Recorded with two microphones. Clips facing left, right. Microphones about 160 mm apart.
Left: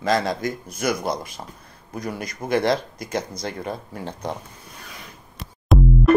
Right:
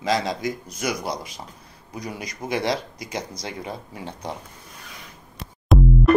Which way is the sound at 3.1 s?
15° right (ahead or behind).